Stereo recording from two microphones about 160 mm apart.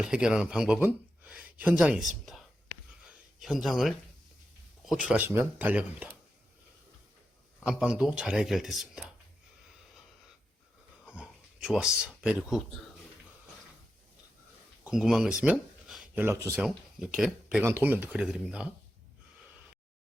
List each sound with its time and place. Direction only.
0.0 s speech: 5° right (ahead or behind)
3.1 s a sound: centre (ahead or behind)
4.9 s speech: 5° right (ahead or behind)
7.6 s speech: 5° right (ahead or behind)
11.1 s a sound: 5° right (ahead or behind)
14.8 s speech: 5° right (ahead or behind)
16.1 s speech: 15° right (ahead or behind)
16.6 s speech: 5° right (ahead or behind)
17.6 s speech: 15° right (ahead or behind)